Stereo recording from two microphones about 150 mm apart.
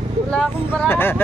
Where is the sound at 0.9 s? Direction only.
15° left (ahead or behind).